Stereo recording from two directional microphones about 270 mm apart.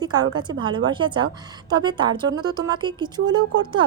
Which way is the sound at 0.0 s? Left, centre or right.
Centre.